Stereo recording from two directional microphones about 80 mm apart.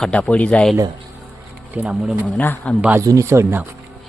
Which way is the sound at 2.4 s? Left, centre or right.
Left.